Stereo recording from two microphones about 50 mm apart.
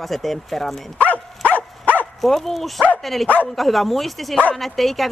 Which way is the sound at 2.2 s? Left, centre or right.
Centre.